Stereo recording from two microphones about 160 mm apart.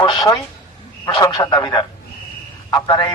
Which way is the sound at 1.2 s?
25° left (ahead or behind).